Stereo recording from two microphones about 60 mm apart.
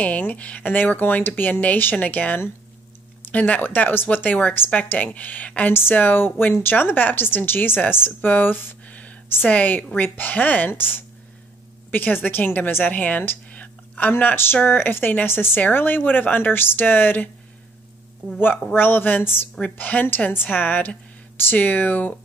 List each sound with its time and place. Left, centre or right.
0.0 s a woman's voice: left
18.8 s a woman's voice: left